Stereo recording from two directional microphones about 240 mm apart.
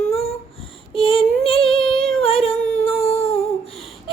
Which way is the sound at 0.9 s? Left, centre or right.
Left.